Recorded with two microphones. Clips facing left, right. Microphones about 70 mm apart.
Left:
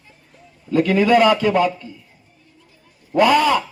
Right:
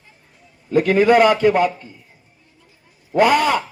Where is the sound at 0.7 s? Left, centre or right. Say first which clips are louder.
Right 1 dB; right.